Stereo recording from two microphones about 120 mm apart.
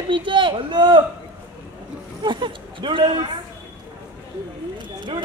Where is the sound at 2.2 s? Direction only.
40° right (ahead or behind).